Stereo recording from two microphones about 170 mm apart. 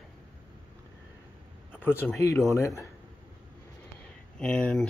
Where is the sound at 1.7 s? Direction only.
10° left (ahead or behind).